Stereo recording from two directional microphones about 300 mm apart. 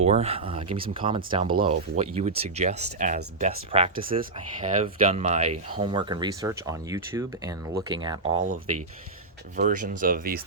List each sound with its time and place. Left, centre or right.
0.0 s speech: right
9.6 s speech: right